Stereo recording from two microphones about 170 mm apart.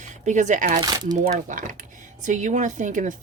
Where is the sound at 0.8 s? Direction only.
25° right (ahead or behind).